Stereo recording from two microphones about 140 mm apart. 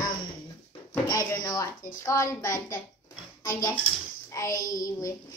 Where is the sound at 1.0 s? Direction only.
25° left (ahead or behind).